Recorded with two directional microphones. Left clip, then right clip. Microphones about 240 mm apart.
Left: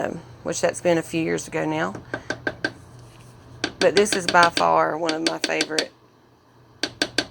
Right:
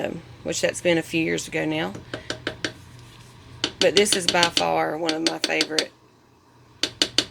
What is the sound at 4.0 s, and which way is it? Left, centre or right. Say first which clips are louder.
Speech: left 4 dB; centre.